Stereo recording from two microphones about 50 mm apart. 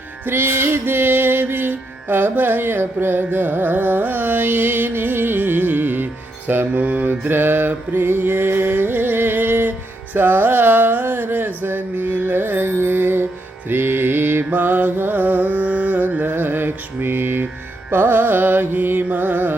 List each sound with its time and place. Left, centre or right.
0.3 s music: right
6.5 s mantra: right
7.3 s music: right
10.2 s a sound: right
13.7 s mantra: right
17.9 s carnatic music: right
19.0 s music: right